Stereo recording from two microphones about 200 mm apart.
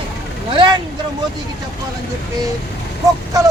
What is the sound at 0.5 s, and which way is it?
Speech, 25° right (ahead or behind).